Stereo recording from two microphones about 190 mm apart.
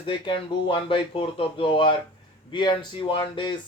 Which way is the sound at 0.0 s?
25° left (ahead or behind).